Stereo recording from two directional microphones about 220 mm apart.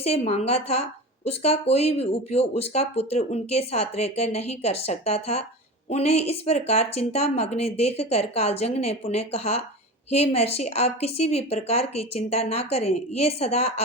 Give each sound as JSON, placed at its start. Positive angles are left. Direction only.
{"t": 0.0, "sound": "speech", "side_deg": 30}